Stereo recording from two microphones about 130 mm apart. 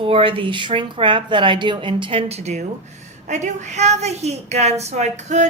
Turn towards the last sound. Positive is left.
turn(degrees=-60)  # may be behind; listen again after turning